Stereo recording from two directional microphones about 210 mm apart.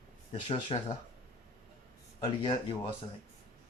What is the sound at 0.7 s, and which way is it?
Speech, 25° left (ahead or behind).